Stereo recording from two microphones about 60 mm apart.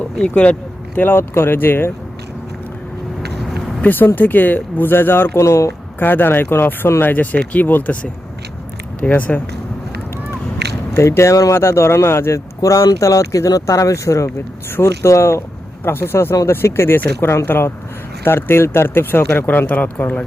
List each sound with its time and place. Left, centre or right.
0.2 s speech: left
0.9 s speech: left
3.8 s speech: left
5.4 s speech: left
6.0 s speech: left
7.1 s speech: left
9.0 s speech: left
10.9 s speech: left
11.5 s speech: left
15.8 s speech: left